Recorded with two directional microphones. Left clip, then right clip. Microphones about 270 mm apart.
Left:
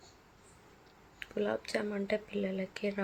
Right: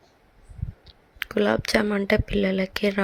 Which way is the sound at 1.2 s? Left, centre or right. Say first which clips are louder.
Right 12 dB; right.